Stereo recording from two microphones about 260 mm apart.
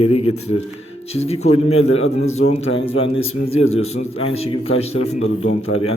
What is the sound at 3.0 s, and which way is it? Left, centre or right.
A man's voice, left.